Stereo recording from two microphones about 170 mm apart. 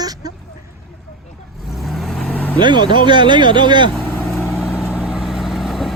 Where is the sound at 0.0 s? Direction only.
20° right (ahead or behind).